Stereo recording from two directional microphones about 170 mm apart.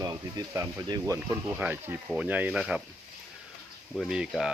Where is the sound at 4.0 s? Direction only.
Centre (ahead or behind).